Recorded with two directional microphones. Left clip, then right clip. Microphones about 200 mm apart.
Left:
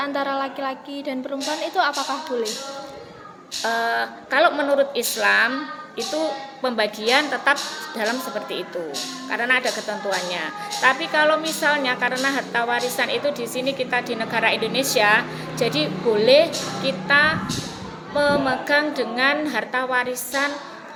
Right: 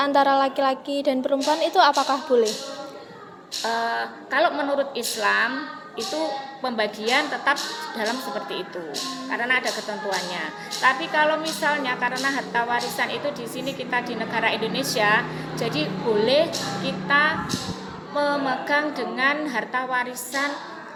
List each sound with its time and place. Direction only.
0.0 s a woman's voice: 25° right (ahead or behind)
3.6 s speech: 30° left (ahead or behind)
6.6 s speech: 30° left (ahead or behind)
9.3 s speech: 30° left (ahead or behind)